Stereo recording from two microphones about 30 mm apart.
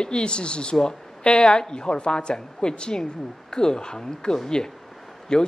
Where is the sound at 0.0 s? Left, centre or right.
Left.